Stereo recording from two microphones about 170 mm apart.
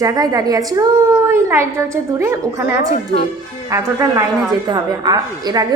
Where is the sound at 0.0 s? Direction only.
20° right (ahead or behind).